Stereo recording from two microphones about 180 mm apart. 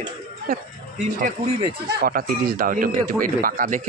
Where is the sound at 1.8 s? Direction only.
55° right (ahead or behind).